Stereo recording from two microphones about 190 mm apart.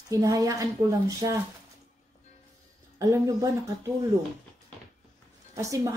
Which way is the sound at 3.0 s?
15° right (ahead or behind).